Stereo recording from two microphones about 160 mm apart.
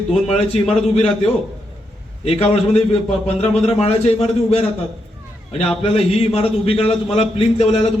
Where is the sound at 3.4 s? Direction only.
40° left (ahead or behind).